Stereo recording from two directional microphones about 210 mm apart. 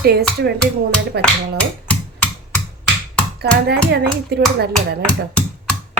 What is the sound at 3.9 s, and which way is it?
Speech, 50° right (ahead or behind).